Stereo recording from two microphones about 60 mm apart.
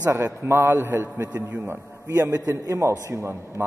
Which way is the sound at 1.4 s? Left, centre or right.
Right.